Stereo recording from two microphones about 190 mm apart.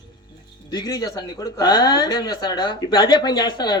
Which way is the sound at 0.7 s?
20° left (ahead or behind).